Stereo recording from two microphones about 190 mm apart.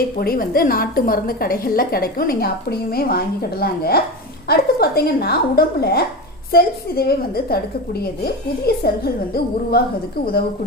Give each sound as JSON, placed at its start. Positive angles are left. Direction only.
{"t": 0.2, "sound": "a woman's voice", "side_deg": 50}